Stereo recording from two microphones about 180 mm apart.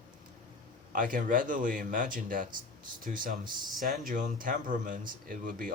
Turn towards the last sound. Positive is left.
turn(degrees=-50)  # may be behind; listen again after turning